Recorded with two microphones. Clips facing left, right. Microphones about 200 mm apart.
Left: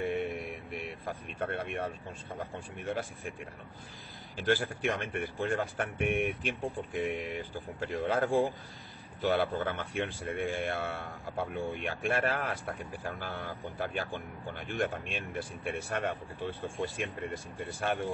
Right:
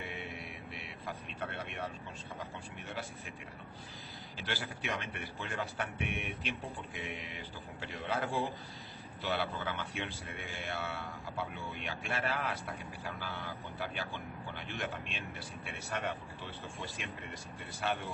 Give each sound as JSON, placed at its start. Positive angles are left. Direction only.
{"t": 0.0, "sound": "a sound", "side_deg": 50}
{"t": 2.3, "sound": "a man's voice", "side_deg": 50}
{"t": 4.4, "sound": "a man's voice", "side_deg": 50}